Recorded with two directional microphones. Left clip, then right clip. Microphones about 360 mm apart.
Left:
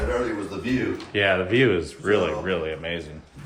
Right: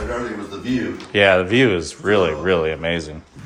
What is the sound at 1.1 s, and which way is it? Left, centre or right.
Speech, centre.